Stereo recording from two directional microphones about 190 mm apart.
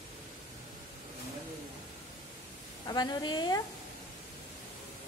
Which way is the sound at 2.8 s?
20° left (ahead or behind).